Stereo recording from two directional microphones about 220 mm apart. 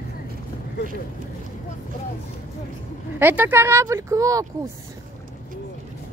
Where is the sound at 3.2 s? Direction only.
10° right (ahead or behind).